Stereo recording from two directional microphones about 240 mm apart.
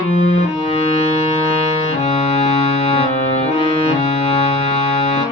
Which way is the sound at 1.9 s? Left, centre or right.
Left.